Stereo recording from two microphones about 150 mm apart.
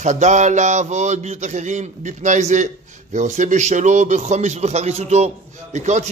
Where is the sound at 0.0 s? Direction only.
55° right (ahead or behind).